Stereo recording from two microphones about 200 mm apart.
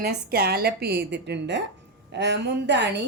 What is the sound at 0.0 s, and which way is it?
A woman's voice, 50° right (ahead or behind).